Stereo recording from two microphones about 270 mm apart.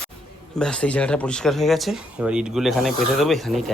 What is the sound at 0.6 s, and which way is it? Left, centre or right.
Speech, centre.